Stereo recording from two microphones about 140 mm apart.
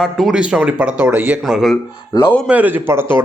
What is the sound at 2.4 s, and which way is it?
Speech, 10° right (ahead or behind).